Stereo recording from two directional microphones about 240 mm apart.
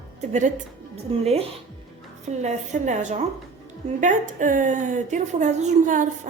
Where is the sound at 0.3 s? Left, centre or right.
Right.